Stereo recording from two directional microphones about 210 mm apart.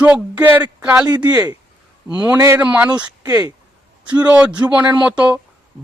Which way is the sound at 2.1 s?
5° right (ahead or behind).